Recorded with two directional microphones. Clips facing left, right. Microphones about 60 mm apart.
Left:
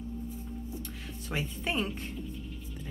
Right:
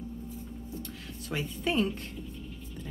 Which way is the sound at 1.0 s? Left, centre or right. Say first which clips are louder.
Even; centre.